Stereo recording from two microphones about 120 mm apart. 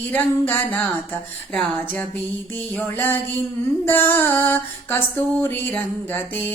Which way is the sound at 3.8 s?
20° left (ahead or behind).